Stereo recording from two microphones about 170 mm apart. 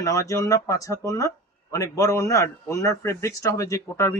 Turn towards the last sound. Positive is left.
turn(degrees=20)  # may be behind; listen again after turning